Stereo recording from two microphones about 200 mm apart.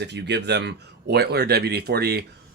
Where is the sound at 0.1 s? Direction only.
60° right (ahead or behind).